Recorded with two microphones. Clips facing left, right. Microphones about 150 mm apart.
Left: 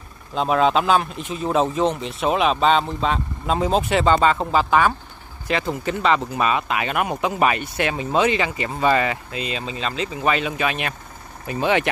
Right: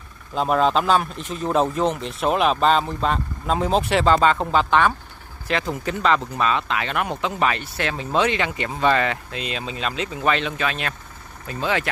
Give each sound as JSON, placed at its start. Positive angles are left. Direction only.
{"t": 0.3, "sound": "speech", "side_deg": 0}